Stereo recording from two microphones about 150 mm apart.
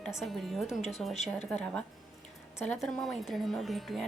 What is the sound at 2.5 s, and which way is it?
Speech, 10° left (ahead or behind).